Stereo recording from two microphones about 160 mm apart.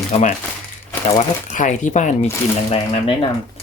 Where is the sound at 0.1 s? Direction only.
45° left (ahead or behind).